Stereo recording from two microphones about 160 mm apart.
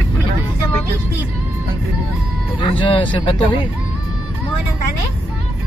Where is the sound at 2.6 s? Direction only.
30° left (ahead or behind).